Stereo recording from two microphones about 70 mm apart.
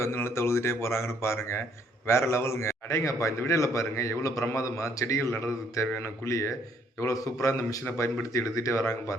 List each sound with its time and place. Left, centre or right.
0.0 s a man's voice: left